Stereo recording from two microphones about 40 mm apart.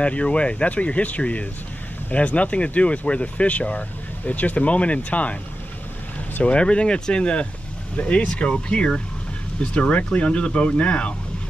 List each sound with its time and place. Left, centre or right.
0.0 s speech: left
6.4 s speech: left